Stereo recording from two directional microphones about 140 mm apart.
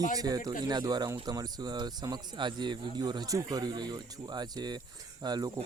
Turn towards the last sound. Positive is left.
turn(degrees=-30)  # may be behind; listen again after turning